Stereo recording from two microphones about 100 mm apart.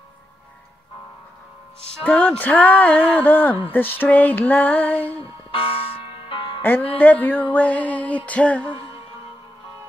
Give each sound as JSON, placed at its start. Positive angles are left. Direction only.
{"t": 2.0, "sound": "speech", "side_deg": 15}
{"t": 5.0, "sound": "music", "side_deg": 65}
{"t": 6.6, "sound": "music", "side_deg": 20}
{"t": 7.0, "sound": "speech", "side_deg": 15}